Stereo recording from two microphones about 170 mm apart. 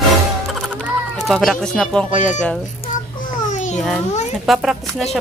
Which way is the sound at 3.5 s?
45° left (ahead or behind).